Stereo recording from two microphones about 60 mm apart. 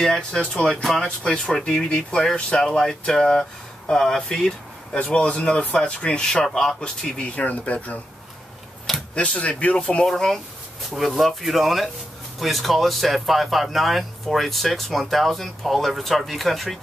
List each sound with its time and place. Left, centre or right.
0.0 s speech: centre
9.1 s speech: left
10.0 s speech: centre